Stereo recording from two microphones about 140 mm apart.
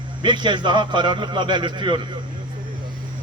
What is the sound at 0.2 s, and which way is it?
A man's voice, 35° right (ahead or behind).